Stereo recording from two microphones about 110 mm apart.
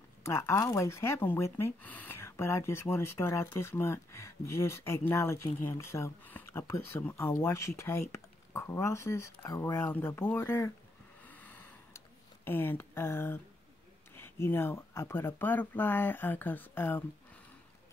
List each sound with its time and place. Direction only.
0.2 s speech: 25° left (ahead or behind)
11.2 s a sound: 15° left (ahead or behind)
12.4 s speech: 20° left (ahead or behind)